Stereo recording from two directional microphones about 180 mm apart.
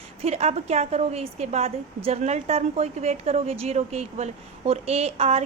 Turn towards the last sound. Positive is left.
turn(degrees=-35)  # may be behind; listen again after turning